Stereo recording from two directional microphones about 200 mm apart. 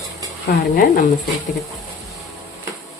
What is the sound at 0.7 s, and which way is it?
Speech, 45° left (ahead or behind).